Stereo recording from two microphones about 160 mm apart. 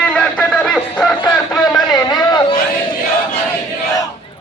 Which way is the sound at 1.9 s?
25° left (ahead or behind).